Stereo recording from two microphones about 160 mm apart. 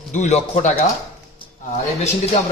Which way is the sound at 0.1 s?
45° left (ahead or behind).